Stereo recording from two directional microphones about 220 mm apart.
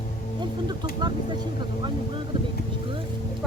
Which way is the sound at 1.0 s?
20° right (ahead or behind).